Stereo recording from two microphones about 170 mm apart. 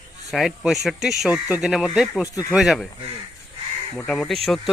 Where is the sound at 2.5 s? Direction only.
Centre (ahead or behind).